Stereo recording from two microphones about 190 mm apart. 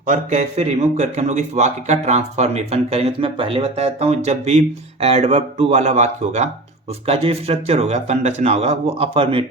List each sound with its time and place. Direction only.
0.0 s a man's voice: 40° right (ahead or behind)